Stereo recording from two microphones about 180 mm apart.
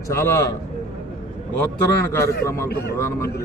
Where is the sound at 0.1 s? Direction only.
15° left (ahead or behind).